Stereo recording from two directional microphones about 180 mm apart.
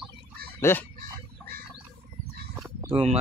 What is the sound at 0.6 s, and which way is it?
Fowl, 15° left (ahead or behind).